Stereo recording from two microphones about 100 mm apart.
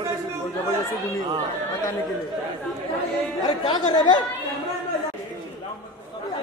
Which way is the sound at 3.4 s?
45° left (ahead or behind).